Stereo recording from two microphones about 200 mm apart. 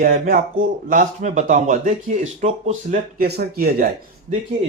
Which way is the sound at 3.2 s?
50° right (ahead or behind).